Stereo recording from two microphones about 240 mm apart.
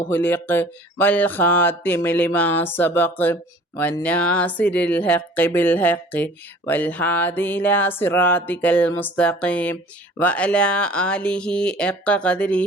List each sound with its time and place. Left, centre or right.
0.0 s speech: centre